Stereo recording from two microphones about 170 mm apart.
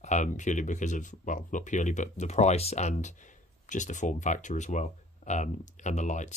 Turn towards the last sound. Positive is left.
turn(degrees=45)  # may be behind; listen again after turning